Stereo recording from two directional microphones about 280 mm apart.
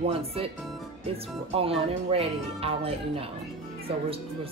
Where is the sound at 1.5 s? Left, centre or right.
Centre.